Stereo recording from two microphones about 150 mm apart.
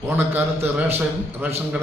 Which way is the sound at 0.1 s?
15° right (ahead or behind).